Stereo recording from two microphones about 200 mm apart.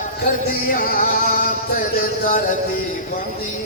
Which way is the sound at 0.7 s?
45° left (ahead or behind).